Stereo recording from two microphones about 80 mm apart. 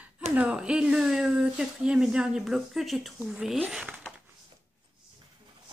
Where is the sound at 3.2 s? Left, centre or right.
Centre.